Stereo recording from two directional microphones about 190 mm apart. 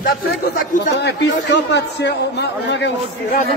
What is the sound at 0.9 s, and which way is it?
A man's voice, 65° left (ahead or behind).